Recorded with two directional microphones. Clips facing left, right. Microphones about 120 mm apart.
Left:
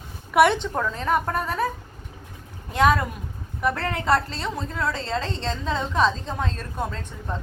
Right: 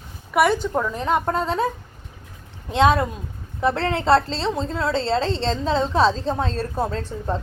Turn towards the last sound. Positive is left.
turn(degrees=-35)  # may be behind; listen again after turning